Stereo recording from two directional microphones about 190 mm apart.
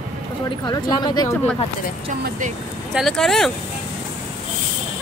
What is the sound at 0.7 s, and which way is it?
Speech, 20° left (ahead or behind).